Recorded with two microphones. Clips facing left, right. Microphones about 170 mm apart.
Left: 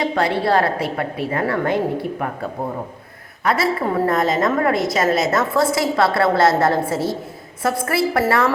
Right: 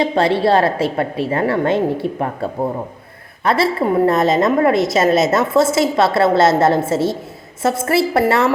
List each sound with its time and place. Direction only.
0.0 s a woman's voice: 25° right (ahead or behind)